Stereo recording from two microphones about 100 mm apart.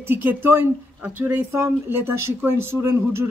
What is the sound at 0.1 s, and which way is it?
Speech, 20° right (ahead or behind).